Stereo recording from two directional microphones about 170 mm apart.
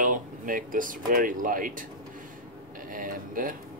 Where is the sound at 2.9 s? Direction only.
55° right (ahead or behind).